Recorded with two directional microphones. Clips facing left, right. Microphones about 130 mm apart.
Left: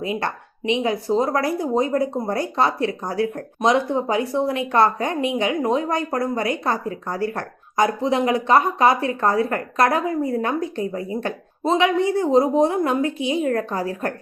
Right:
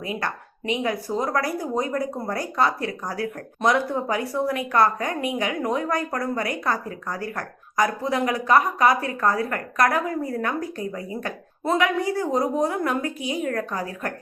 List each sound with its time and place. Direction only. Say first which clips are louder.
0.0 s speech: left 4 dB; 25° left (ahead or behind)